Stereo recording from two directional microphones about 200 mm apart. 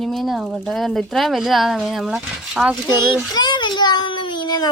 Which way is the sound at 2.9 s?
20° left (ahead or behind).